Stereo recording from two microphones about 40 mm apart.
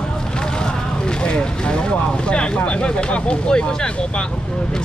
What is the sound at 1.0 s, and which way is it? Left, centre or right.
Speech, left.